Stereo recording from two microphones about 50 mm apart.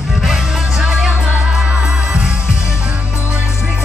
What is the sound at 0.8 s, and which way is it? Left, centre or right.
Music, centre.